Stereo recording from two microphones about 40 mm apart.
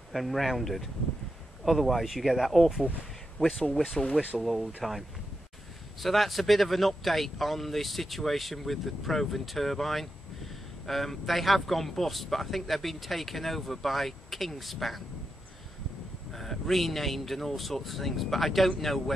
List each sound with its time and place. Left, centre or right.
0.1 s speech: centre
3.3 s speech: centre
3.7 s speech: centre
5.9 s speech: centre
16.3 s speech: centre